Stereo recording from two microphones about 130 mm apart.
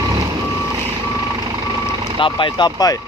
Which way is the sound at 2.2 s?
40° left (ahead or behind).